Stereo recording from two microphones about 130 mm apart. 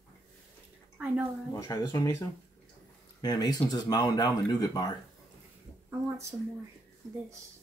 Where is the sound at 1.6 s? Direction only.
30° left (ahead or behind).